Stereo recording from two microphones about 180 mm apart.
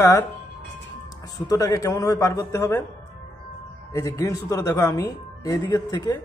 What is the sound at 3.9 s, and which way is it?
Speech, 15° left (ahead or behind).